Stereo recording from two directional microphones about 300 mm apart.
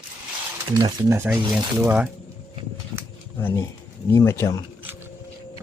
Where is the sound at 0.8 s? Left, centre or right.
Centre.